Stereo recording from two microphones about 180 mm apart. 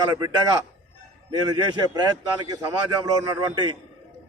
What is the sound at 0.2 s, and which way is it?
A man's voice, 20° right (ahead or behind).